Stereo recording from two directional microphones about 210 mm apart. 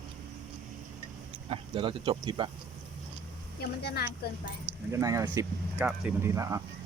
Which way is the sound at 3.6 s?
50° left (ahead or behind).